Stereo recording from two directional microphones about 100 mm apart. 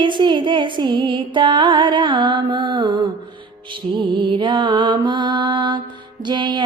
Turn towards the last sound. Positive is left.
turn(degrees=-50)  # may be behind; listen again after turning